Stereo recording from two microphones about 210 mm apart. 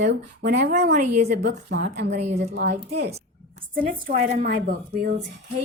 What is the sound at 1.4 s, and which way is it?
Speech, 50° right (ahead or behind).